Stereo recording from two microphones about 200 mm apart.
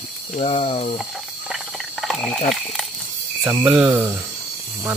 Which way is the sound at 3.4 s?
10° right (ahead or behind).